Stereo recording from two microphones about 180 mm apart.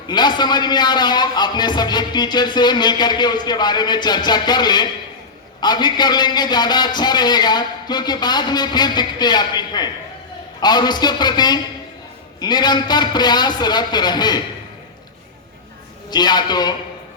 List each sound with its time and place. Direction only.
0.1 s a man's voice: 25° left (ahead or behind)
16.0 s a man's voice: 25° left (ahead or behind)